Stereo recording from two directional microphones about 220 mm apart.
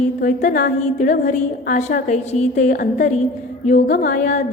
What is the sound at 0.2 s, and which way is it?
A woman's voice, 40° left (ahead or behind).